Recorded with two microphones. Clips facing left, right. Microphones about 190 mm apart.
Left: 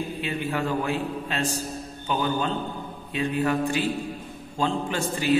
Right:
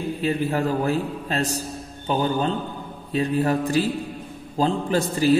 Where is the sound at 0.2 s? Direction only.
40° right (ahead or behind).